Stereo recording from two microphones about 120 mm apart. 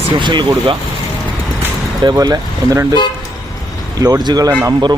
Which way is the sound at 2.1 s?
30° right (ahead or behind).